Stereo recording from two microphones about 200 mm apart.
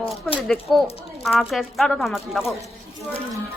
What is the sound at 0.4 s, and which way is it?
Speech, centre (ahead or behind).